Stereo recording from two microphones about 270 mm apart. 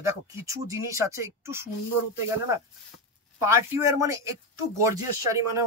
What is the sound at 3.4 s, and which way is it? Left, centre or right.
Speech, centre.